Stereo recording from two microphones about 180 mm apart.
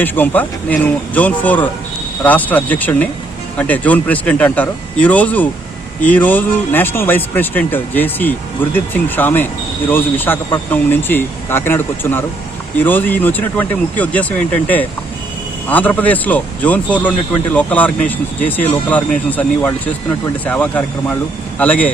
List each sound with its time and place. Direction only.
0.0 s speech: 10° left (ahead or behind)